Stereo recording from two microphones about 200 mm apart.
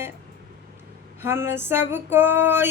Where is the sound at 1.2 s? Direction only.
10° right (ahead or behind).